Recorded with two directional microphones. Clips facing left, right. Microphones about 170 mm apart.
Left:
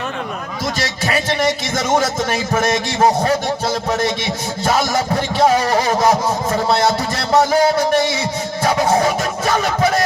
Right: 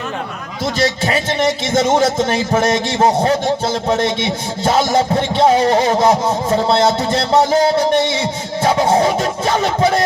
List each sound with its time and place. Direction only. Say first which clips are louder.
0.8 s speech: right 5 dB; 30° right (ahead or behind)